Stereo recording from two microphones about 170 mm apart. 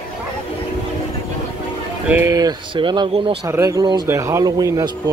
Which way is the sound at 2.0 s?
15° right (ahead or behind).